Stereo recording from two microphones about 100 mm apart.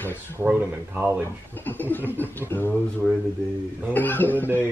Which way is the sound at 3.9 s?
20° left (ahead or behind).